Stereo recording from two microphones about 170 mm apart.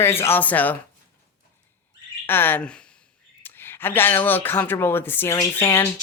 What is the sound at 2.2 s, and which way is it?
Speech, 10° left (ahead or behind).